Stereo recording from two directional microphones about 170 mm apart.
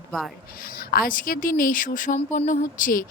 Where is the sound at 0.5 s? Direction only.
60° left (ahead or behind).